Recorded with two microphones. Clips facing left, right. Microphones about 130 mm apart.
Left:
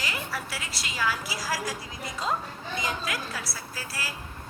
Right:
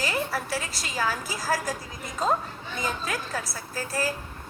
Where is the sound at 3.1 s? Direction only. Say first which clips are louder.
Right 2 dB; 45° right (ahead or behind).